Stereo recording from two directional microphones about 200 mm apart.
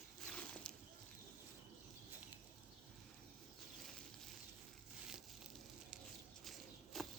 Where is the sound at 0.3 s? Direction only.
5° left (ahead or behind).